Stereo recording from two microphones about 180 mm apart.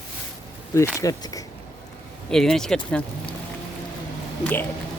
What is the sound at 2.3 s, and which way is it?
Speech, centre (ahead or behind).